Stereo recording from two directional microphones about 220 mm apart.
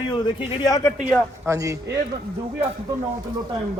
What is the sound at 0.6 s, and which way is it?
Speech, 15° left (ahead or behind).